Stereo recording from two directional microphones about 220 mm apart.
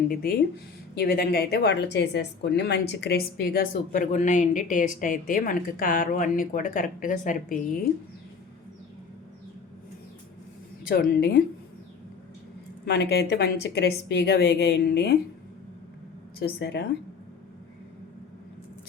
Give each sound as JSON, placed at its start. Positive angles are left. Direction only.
{"t": 0.1, "sound": "a woman's voice", "side_deg": 40}
{"t": 10.8, "sound": "a woman's voice", "side_deg": 45}
{"t": 12.8, "sound": "a woman's voice", "side_deg": 50}
{"t": 16.4, "sound": "a woman's voice", "side_deg": 50}